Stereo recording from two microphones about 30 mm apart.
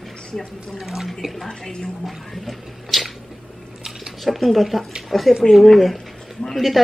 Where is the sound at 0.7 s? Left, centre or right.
Centre.